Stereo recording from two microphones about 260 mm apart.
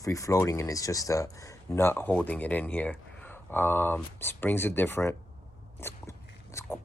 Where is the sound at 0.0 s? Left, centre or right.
Centre.